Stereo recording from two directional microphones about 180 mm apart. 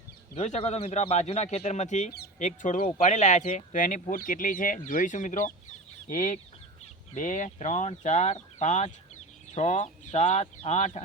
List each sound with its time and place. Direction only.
0.3 s speech: 35° left (ahead or behind)